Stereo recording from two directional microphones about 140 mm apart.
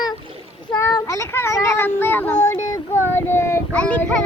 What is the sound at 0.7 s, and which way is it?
Speech, 25° left (ahead or behind).